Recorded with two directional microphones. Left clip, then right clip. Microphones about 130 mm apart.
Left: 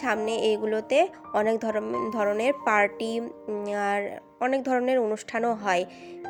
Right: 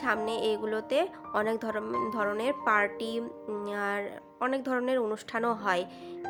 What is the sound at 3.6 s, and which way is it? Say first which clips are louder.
A woman's voice: left 6 dB; 25° left (ahead or behind).